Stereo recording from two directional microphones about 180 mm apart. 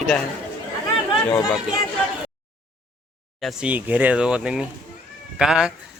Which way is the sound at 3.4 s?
Centre (ahead or behind).